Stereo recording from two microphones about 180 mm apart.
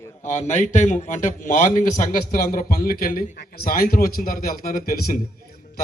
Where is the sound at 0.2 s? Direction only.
40° left (ahead or behind).